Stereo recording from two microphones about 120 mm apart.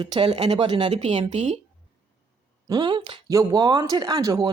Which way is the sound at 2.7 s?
35° right (ahead or behind).